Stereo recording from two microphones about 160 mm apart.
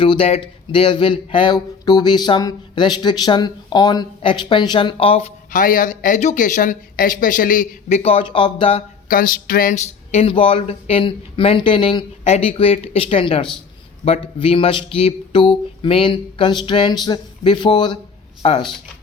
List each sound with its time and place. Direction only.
0.0 s speech: 35° left (ahead or behind)
5.5 s speech: 60° left (ahead or behind); by 8.8 s 35° left (ahead or behind)
9.0 s speech: 60° left (ahead or behind)
10.1 s speech: 40° left (ahead or behind)